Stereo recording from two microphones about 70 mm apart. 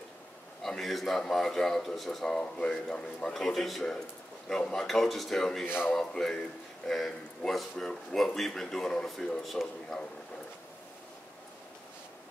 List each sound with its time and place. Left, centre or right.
0.6 s a man's voice: centre
3.4 s a man's voice: centre
5.7 s speech: left
5.9 s a man's voice: centre